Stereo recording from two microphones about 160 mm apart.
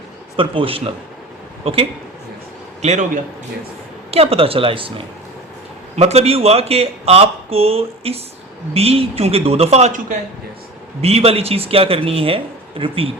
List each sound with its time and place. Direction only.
0.3 s a man's voice: 35° right (ahead or behind)
4.1 s speech: 40° right (ahead or behind)